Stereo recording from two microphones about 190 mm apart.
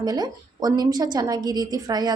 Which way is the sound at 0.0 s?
20° right (ahead or behind).